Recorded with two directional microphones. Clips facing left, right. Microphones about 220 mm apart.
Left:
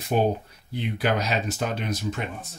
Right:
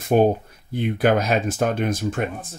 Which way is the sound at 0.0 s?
50° right (ahead or behind).